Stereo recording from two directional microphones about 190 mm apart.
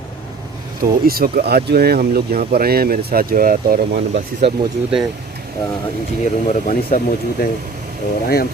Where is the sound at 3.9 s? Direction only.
30° right (ahead or behind).